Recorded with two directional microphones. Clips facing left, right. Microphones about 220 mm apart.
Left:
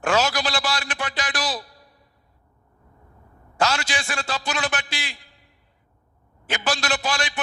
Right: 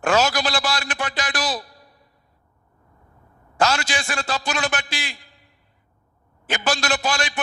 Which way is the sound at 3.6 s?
45° right (ahead or behind).